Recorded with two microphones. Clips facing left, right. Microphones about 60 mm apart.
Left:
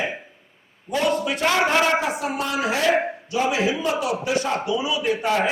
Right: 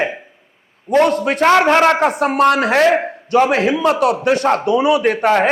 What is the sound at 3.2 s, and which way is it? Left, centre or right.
A man's voice, right.